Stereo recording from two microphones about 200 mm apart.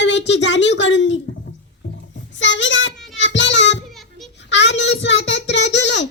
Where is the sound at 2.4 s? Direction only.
70° left (ahead or behind).